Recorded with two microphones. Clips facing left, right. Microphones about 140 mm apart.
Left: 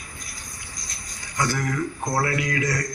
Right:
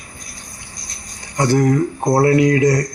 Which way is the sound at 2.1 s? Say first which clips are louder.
Right 14 dB; 25° right (ahead or behind).